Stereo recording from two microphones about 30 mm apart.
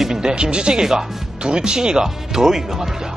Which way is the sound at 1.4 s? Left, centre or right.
Right.